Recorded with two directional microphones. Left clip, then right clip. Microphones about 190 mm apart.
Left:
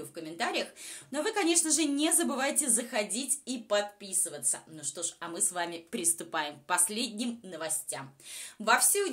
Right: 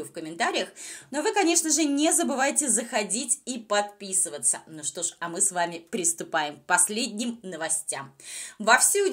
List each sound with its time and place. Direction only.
0.1 s a woman's voice: 30° right (ahead or behind)